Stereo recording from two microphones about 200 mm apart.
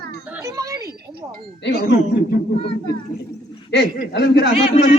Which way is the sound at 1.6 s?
55° left (ahead or behind).